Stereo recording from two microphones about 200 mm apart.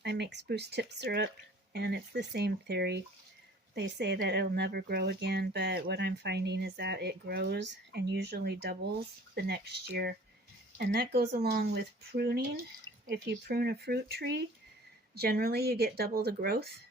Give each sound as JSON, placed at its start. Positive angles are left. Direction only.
{"t": 0.0, "sound": "speech", "side_deg": -55}